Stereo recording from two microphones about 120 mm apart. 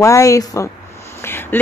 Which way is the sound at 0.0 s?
25° left (ahead or behind).